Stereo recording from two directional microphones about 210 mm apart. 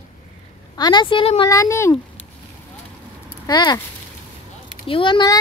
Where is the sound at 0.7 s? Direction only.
20° left (ahead or behind).